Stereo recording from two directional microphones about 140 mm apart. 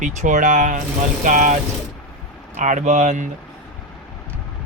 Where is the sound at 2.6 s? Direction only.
60° right (ahead or behind).